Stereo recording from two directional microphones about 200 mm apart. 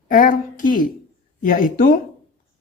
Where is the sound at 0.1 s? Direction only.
45° left (ahead or behind).